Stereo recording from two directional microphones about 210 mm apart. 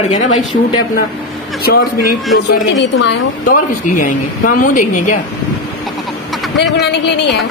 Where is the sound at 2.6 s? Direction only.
60° left (ahead or behind).